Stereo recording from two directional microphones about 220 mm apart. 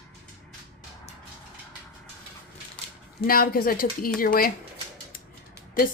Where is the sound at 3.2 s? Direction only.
40° left (ahead or behind).